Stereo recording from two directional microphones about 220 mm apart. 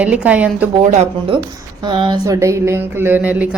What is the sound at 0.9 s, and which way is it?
Speech, 30° right (ahead or behind).